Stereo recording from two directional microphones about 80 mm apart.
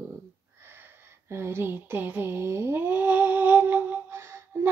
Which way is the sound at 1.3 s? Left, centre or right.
Right.